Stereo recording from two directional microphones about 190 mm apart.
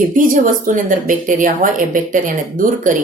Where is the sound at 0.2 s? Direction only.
45° right (ahead or behind).